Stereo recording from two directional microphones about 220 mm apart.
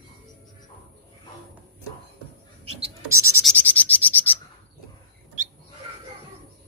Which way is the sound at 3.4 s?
5° left (ahead or behind).